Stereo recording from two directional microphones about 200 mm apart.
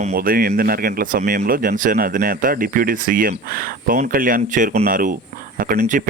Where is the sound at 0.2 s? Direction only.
50° right (ahead or behind).